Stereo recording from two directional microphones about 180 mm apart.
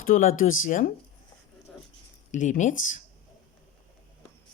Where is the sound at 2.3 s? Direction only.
40° left (ahead or behind).